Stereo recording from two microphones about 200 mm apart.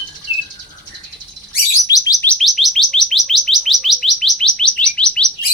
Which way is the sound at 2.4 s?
Centre (ahead or behind).